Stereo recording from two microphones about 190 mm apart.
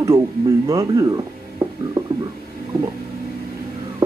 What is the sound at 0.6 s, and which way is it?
Music, 20° right (ahead or behind).